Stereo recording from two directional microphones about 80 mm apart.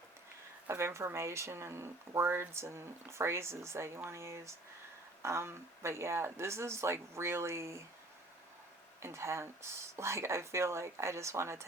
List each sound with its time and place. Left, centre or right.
0.7 s speech: right
9.0 s speech: right